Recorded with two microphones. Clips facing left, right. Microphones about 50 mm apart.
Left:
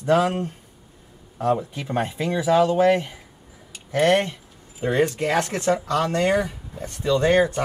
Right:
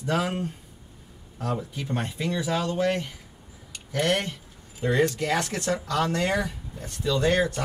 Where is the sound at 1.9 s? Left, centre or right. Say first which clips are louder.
Left 5 dB; left.